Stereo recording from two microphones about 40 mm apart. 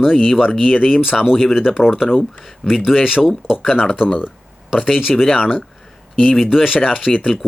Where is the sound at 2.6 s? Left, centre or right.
Centre.